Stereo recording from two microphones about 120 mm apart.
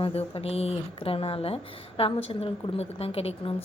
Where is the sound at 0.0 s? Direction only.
55° left (ahead or behind).